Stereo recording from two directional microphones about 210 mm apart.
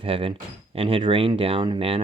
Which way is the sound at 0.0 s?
25° right (ahead or behind).